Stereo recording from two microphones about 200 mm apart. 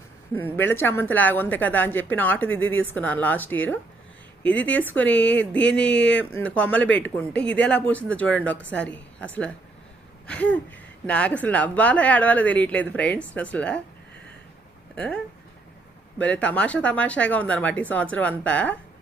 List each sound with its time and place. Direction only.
0.3 s a woman's voice: 10° left (ahead or behind)
14.9 s speech: 5° left (ahead or behind)